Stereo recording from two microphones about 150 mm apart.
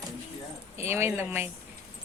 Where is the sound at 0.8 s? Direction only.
15° right (ahead or behind).